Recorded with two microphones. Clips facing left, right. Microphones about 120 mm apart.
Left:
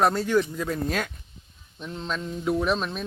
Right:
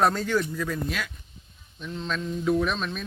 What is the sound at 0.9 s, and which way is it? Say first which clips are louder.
Speech: left 4 dB; 45° left (ahead or behind).